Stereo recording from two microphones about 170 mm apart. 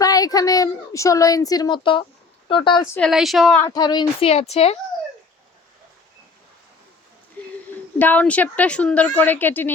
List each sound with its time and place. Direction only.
0.0 s a woman's voice: 20° left (ahead or behind)
3.1 s speech: centre (ahead or behind)
3.6 s speech: 25° left (ahead or behind)
7.4 s a sound: 10° left (ahead or behind)
7.7 s a woman's voice: 10° left (ahead or behind)